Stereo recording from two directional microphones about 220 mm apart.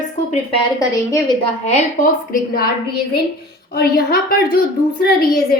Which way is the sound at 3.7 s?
45° left (ahead or behind).